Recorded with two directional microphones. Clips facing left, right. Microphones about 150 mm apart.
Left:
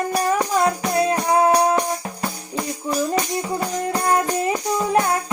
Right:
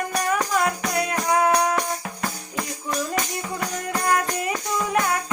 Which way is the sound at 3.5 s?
30° left (ahead or behind).